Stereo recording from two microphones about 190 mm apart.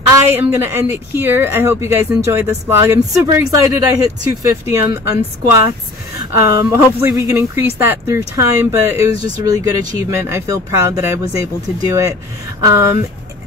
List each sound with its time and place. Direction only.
0.1 s a woman's voice: 10° right (ahead or behind)